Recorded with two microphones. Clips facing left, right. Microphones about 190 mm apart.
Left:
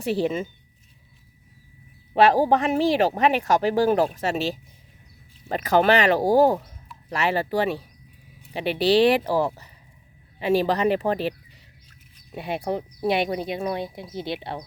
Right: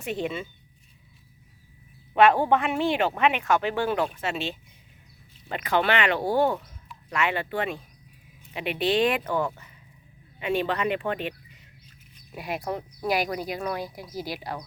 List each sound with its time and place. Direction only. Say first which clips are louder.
0.0 s speech: left 6 dB; 35° left (ahead or behind)
2.1 s speech: left 2 dB; 35° left (ahead or behind)